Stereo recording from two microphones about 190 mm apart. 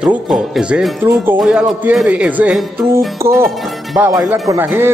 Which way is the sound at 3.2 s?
15° right (ahead or behind).